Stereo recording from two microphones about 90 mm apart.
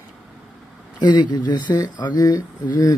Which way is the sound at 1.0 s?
55° left (ahead or behind).